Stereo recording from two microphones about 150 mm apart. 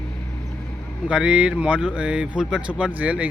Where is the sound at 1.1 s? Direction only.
5° right (ahead or behind).